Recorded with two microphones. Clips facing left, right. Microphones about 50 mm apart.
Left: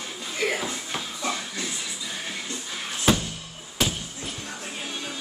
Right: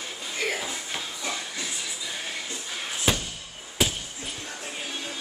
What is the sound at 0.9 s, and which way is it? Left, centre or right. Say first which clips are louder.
Shuffle: left 4 dB; centre.